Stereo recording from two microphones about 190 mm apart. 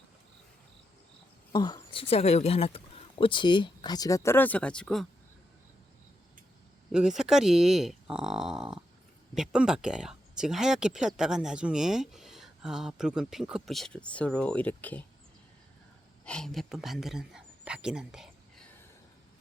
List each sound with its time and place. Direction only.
1.5 s speech: 25° left (ahead or behind); by 5.0 s 5° left (ahead or behind)
6.9 s speech: 5° right (ahead or behind)
16.2 s speech: 5° left (ahead or behind)